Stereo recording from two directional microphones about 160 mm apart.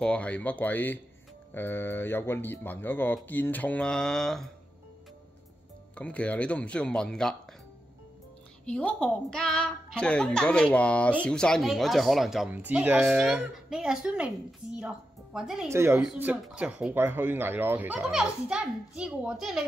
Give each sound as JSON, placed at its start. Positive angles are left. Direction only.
{"t": 0.0, "sound": "a woman's voice", "side_deg": 10}
{"t": 5.9, "sound": "a woman's voice", "side_deg": 10}
{"t": 8.6, "sound": "a woman's voice", "side_deg": 5}
{"t": 15.7, "sound": "speech", "side_deg": -15}